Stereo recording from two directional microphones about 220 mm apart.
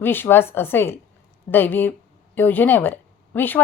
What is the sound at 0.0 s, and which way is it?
A woman's voice, 10° left (ahead or behind).